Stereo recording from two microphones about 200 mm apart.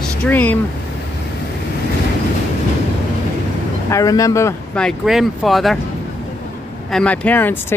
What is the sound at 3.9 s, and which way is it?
Speech, 15° left (ahead or behind).